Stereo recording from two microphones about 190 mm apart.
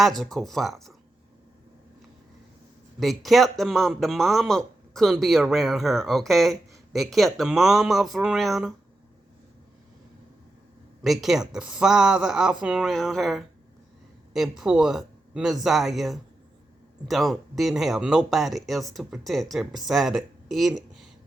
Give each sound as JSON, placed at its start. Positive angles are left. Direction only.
{"t": 0.0, "sound": "speech", "side_deg": 0}
{"t": 3.0, "sound": "speech", "side_deg": 0}
{"t": 11.0, "sound": "speech", "side_deg": 0}